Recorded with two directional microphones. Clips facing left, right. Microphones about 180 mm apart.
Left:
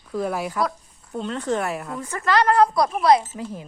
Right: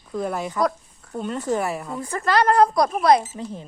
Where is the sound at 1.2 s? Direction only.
5° right (ahead or behind).